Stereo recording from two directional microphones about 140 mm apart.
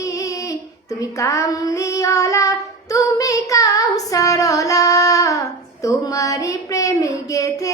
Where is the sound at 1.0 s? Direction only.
25° left (ahead or behind).